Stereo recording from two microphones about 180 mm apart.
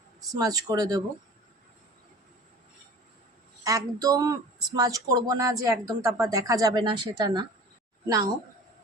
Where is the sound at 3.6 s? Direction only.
20° right (ahead or behind).